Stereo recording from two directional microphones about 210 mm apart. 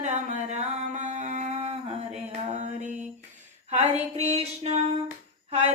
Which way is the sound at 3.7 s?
30° right (ahead or behind).